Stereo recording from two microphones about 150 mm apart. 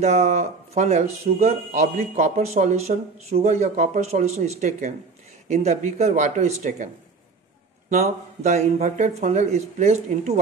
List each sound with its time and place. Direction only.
0.0 s a man's voice: 45° right (ahead or behind)
7.9 s a man's voice: 50° right (ahead or behind)